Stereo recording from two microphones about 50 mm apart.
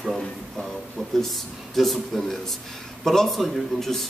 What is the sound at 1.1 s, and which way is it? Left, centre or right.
Speech, centre.